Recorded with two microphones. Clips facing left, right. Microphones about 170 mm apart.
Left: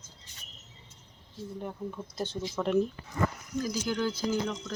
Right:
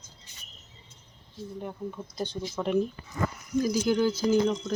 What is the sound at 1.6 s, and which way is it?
Speech, centre (ahead or behind).